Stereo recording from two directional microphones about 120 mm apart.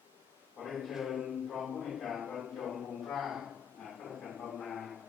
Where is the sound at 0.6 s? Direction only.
Centre (ahead or behind).